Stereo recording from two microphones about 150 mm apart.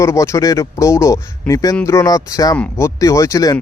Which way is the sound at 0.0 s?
20° left (ahead or behind).